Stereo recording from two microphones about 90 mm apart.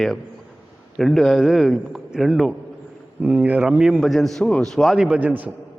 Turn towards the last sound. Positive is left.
turn(degrees=-20)  # may be behind; listen again after turning